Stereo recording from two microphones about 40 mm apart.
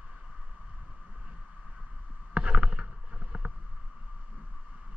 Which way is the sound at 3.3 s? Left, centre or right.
Right.